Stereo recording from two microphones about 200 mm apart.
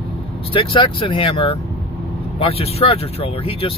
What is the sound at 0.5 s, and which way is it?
Speech, 25° left (ahead or behind).